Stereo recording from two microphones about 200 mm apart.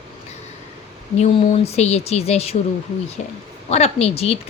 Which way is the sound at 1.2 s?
30° left (ahead or behind).